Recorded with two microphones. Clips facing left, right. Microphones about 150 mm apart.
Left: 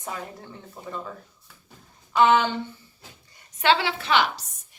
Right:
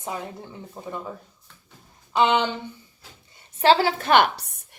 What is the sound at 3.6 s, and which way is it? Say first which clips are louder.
A woman's voice: right 4 dB; 40° right (ahead or behind).